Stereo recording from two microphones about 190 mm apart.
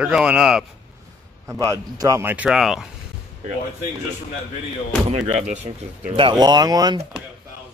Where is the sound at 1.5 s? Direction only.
15° right (ahead or behind).